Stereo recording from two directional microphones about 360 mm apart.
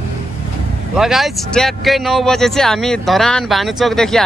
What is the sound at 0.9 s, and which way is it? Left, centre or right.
Speech, centre.